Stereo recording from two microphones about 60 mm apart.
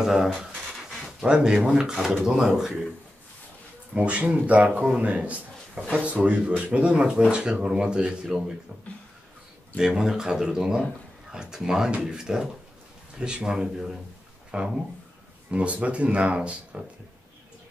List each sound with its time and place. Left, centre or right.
0.0 s speech: centre
3.9 s speech: right
9.8 s speech: centre